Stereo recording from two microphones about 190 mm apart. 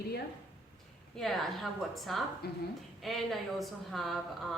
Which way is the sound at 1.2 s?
Centre (ahead or behind).